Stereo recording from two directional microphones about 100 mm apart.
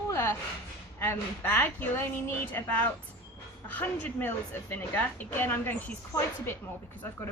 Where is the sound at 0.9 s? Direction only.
25° left (ahead or behind).